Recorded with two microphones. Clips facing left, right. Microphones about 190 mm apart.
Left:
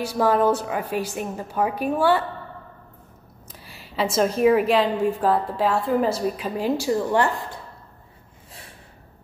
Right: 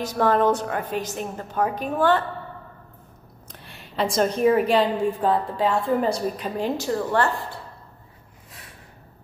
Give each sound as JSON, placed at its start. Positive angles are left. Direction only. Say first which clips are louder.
{"t": 0.0, "sound": "a woman's voice", "louder": "even", "side_deg": 10}
{"t": 3.5, "sound": "a woman's voice", "louder": "even", "side_deg": 5}